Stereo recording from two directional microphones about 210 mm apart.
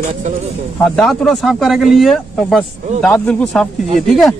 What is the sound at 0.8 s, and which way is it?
Speech, 5° left (ahead or behind).